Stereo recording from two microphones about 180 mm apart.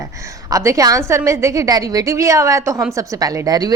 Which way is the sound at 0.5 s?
20° right (ahead or behind).